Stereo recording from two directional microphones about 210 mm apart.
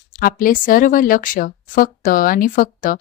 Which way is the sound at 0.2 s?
45° left (ahead or behind).